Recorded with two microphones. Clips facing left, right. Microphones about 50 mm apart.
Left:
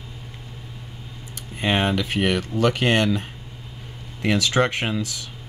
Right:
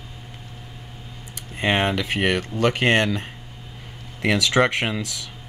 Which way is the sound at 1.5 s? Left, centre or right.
Right.